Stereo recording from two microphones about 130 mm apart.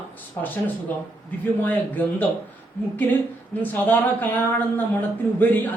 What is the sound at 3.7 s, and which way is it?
A man's voice, 15° left (ahead or behind).